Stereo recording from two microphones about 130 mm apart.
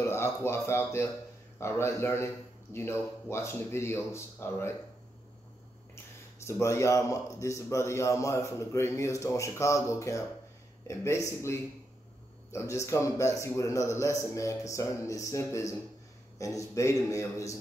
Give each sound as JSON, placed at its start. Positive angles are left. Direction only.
{"t": 0.0, "sound": "a man's voice", "side_deg": 20}
{"t": 6.4, "sound": "a man's voice", "side_deg": 20}